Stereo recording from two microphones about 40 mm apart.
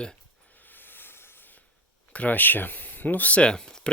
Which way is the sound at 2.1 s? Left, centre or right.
Left.